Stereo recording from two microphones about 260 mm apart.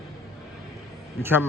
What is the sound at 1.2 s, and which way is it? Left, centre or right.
Speech, centre.